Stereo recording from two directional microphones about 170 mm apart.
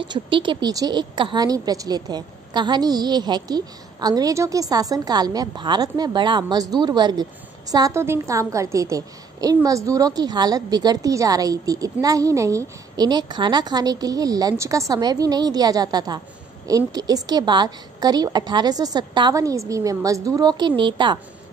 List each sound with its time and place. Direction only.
0.0 s a woman's voice: 30° right (ahead or behind)